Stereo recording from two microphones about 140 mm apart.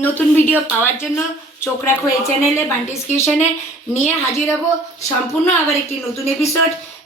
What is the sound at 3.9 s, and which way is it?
Speech, 55° left (ahead or behind).